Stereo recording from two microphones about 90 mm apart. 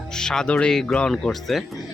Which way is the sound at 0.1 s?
5° left (ahead or behind).